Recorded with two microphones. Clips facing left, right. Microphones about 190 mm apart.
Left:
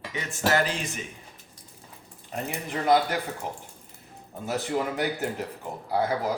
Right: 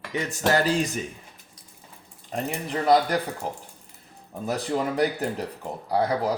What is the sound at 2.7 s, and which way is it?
Speech, 35° right (ahead or behind).